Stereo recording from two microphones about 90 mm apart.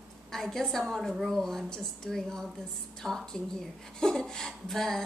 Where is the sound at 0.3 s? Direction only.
5° left (ahead or behind).